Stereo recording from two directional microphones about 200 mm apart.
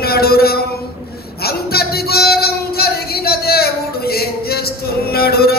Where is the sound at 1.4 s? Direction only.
50° left (ahead or behind).